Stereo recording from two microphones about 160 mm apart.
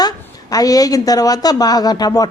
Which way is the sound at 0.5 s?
20° left (ahead or behind).